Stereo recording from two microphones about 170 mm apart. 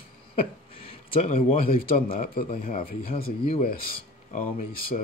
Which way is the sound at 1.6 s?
60° left (ahead or behind).